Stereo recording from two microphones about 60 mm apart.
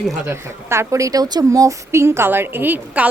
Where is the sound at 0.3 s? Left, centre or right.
Right.